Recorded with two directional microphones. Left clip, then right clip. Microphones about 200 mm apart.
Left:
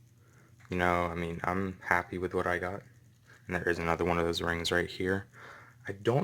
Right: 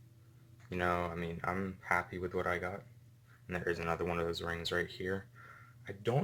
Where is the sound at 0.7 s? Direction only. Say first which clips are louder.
Left 5 dB; 35° left (ahead or behind).